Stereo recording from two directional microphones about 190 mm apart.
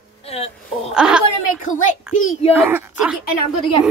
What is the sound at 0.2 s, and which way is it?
Speech, 35° left (ahead or behind).